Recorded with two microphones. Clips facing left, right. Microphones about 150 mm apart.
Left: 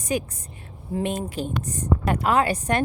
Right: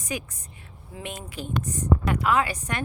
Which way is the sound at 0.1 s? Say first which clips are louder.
Left 7 dB; 30° left (ahead or behind).